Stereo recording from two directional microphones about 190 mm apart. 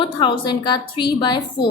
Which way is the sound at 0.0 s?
25° left (ahead or behind).